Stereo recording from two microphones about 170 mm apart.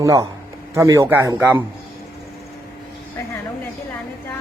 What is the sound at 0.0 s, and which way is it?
A man's voice, 20° right (ahead or behind).